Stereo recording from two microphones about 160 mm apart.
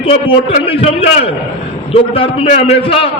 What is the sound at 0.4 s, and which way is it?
A man's voice, 35° left (ahead or behind).